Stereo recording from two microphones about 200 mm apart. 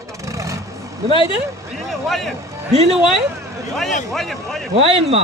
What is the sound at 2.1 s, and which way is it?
Speech, centre (ahead or behind).